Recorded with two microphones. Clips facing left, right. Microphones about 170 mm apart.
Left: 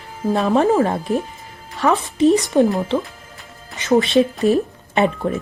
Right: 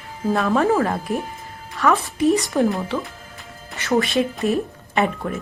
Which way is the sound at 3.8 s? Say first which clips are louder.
Left 4 dB; 20° left (ahead or behind).